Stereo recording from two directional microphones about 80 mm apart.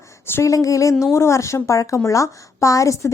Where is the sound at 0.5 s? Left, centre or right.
Left.